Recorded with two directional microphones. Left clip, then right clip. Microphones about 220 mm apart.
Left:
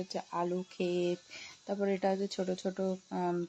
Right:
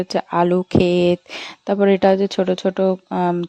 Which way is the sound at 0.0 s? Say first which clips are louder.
Right 17 dB; 45° right (ahead or behind).